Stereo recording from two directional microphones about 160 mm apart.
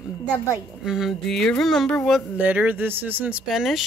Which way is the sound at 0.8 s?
Centre (ahead or behind).